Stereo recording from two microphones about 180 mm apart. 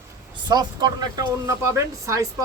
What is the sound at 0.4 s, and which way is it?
Speech, 25° right (ahead or behind).